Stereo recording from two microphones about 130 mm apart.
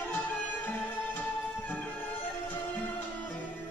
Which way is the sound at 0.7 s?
15° left (ahead or behind).